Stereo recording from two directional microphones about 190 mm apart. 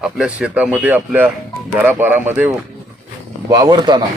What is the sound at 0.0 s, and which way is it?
Speech, 5° right (ahead or behind).